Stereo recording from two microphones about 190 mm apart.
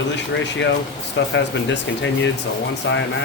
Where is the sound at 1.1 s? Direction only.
70° left (ahead or behind).